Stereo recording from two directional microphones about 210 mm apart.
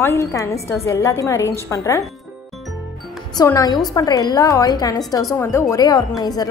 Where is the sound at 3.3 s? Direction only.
15° left (ahead or behind).